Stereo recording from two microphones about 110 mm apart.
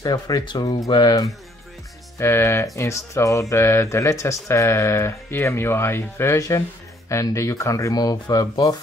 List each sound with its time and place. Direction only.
0.0 s speech: 35° left (ahead or behind)
2.1 s a sound: 25° left (ahead or behind)
7.1 s speech: 30° left (ahead or behind)